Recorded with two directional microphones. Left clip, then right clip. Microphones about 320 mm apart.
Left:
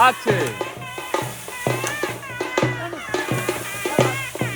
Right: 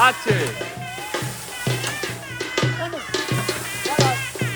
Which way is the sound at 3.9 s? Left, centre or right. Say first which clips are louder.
Even; centre.